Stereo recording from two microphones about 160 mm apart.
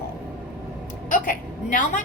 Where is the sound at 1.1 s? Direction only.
55° left (ahead or behind).